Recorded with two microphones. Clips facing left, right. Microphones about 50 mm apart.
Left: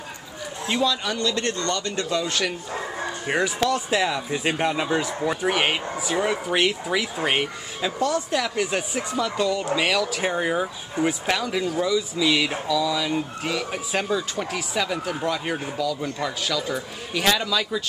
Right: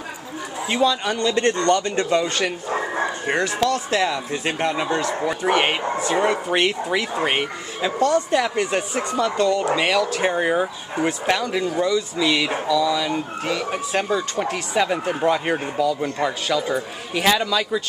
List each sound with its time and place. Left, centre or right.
0.7 s a man's voice: centre
1.2 s speech: right
2.2 s a man's voice: centre
3.3 s speech: right
3.6 s a man's voice: centre
10.3 s a man's voice: centre
11.1 s speech: centre
14.8 s speech: right
17.2 s a man's voice: centre